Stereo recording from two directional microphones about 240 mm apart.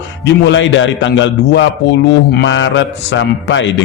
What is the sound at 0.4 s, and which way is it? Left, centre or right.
Speech, left.